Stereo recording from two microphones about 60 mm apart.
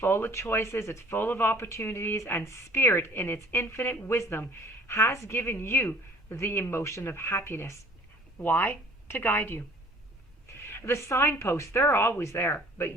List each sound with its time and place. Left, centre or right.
0.0 s a woman's voice: left
1.2 s a woman's voice: left
10.7 s a woman's voice: left